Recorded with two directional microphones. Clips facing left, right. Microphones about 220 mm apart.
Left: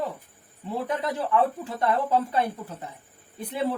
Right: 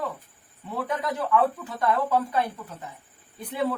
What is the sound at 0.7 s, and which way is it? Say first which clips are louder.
Speech: left 1 dB; 25° left (ahead or behind).